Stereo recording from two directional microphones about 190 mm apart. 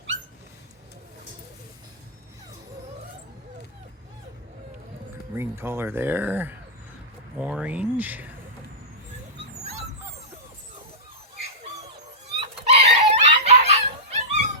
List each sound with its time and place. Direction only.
5.4 s speech: 15° right (ahead or behind)
12.4 s dog: 30° right (ahead or behind)